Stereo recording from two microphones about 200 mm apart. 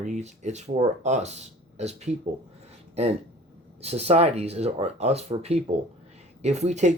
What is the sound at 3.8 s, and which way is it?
Speech, 30° right (ahead or behind).